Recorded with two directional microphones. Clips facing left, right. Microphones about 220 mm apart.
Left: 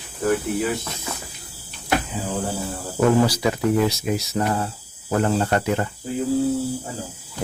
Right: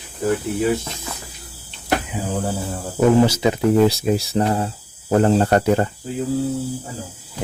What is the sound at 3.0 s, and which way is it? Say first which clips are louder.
Speech: right 3 dB; 20° right (ahead or behind).